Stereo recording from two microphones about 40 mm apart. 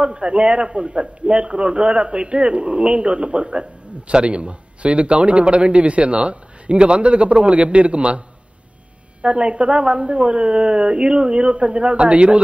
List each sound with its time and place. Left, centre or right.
0.0 s a man's voice: right
9.2 s a man's voice: right